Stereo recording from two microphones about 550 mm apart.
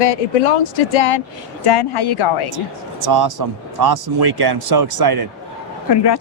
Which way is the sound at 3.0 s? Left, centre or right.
Right.